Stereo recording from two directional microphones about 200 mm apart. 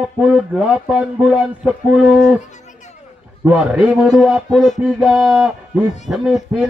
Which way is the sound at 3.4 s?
5° right (ahead or behind).